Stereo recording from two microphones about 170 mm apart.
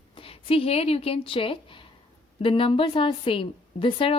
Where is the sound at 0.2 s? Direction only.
35° left (ahead or behind).